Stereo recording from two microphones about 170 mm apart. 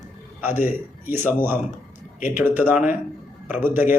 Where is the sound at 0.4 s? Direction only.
10° right (ahead or behind).